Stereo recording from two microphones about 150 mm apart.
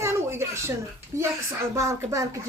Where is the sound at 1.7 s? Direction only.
20° right (ahead or behind).